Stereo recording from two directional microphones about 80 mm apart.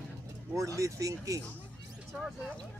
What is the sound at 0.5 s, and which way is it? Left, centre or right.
Speech, right.